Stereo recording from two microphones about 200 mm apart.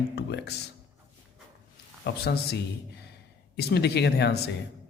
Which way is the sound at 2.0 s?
55° left (ahead or behind).